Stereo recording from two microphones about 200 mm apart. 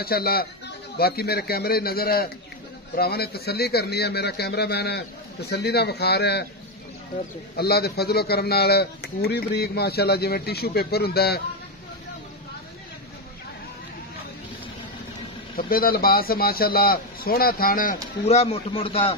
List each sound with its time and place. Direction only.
0.0 s a man's voice: 50° left (ahead or behind)
7.5 s a man's voice: 50° left (ahead or behind)
15.5 s a man's voice: 45° left (ahead or behind)
18.2 s speech: 30° left (ahead or behind)